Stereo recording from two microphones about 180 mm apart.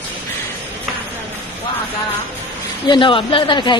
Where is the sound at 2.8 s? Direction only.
25° left (ahead or behind).